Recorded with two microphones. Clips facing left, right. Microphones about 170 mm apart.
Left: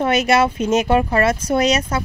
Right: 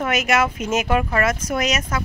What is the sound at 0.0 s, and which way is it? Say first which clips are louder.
Speech: left 4 dB; 30° left (ahead or behind).